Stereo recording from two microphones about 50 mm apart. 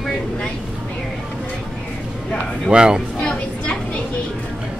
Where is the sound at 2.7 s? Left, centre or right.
Centre.